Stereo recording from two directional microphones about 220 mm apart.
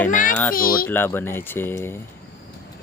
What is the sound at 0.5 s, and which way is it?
Speech, 40° left (ahead or behind).